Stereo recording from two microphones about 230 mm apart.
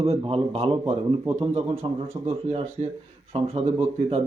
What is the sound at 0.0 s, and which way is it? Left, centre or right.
Speech, right.